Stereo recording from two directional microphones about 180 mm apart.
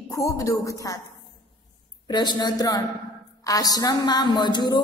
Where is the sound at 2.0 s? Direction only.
25° left (ahead or behind).